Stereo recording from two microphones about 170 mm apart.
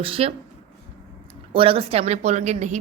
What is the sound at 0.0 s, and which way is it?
Speech, 35° right (ahead or behind).